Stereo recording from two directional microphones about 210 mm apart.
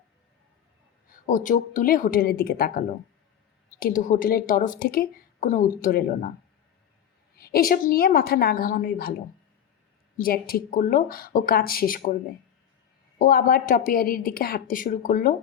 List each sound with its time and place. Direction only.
1.1 s speech: 40° left (ahead or behind)
7.3 s speech: 45° left (ahead or behind)
13.1 s speech: 45° left (ahead or behind)